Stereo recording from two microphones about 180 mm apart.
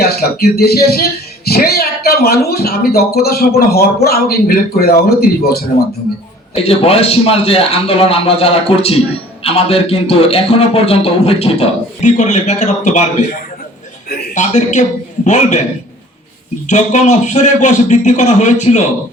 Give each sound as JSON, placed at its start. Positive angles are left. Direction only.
{"t": 0.0, "sound": "speech", "side_deg": 60}
{"t": 6.5, "sound": "speech", "side_deg": 35}
{"t": 14.3, "sound": "a man's voice", "side_deg": 40}
{"t": 16.6, "sound": "speech", "side_deg": 40}